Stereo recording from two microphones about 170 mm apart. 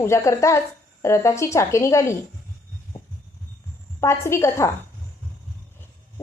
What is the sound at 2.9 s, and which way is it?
Heart sounds, 35° left (ahead or behind).